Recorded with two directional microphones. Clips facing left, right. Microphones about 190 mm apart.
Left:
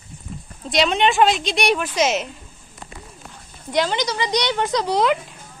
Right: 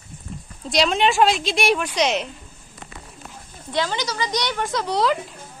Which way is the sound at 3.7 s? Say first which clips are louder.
Left 3 dB; 15° left (ahead or behind).